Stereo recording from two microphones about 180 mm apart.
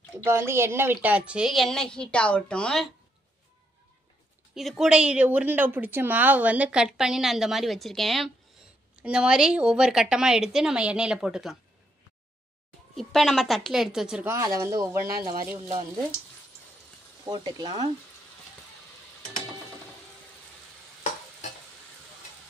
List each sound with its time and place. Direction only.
0.2 s a woman's voice: 15° right (ahead or behind); by 2.9 s 5° left (ahead or behind)
4.6 s a woman's voice: centre (ahead or behind)
12.9 s a woman's voice: centre (ahead or behind)
14.3 s speech: 20° right (ahead or behind)
17.2 s speech: 20° right (ahead or behind)